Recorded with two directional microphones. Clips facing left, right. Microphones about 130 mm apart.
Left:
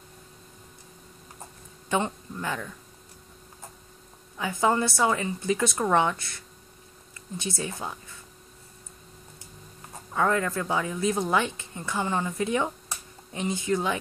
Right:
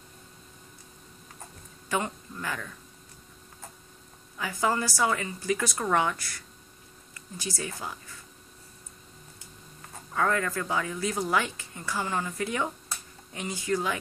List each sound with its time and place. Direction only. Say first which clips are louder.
1.9 s speech: left 3 dB; 25° left (ahead or behind)
4.4 s speech: left 4 dB; 25° left (ahead or behind)
9.8 s speech: left 2 dB; 20° left (ahead or behind)